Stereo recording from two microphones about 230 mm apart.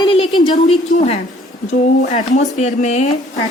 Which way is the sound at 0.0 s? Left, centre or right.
Left.